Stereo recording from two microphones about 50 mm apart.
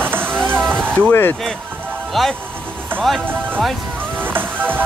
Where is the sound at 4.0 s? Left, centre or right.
Right.